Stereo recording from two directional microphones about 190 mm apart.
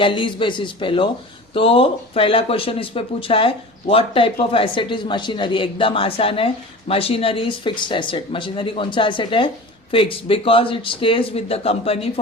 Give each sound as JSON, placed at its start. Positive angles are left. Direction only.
{"t": 0.0, "sound": "speech", "side_deg": 25}